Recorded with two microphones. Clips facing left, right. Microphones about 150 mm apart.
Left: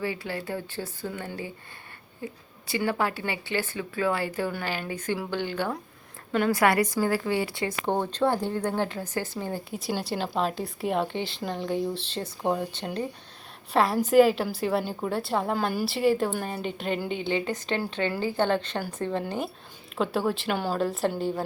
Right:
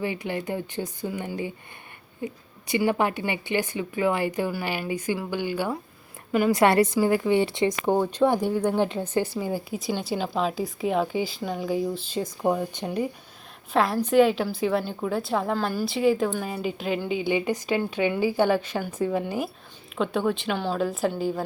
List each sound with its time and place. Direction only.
0.0 s speech: 20° right (ahead or behind)
6.5 s speech: 25° right (ahead or behind)
7.9 s speech: 10° right (ahead or behind)
9.4 s speech: 10° right (ahead or behind)
13.7 s speech: centre (ahead or behind)
20.0 s speech: 5° left (ahead or behind)